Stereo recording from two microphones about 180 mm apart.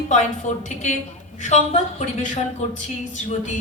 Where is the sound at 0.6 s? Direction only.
40° left (ahead or behind).